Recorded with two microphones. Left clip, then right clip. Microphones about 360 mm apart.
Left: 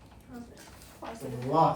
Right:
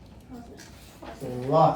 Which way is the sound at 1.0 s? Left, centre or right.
Left.